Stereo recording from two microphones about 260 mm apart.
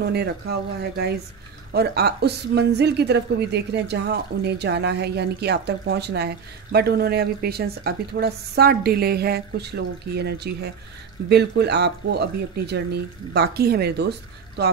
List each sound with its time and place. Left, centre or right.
0.0 s a woman's voice: right